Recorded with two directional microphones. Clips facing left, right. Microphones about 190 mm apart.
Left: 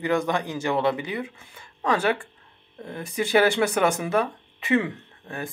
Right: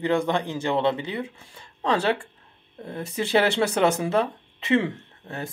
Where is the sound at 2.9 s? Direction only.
25° right (ahead or behind).